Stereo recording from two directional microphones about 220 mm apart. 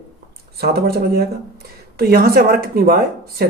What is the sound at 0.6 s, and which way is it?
Speech, 45° right (ahead or behind).